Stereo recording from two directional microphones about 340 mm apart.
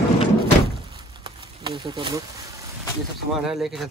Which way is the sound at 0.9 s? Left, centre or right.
Centre.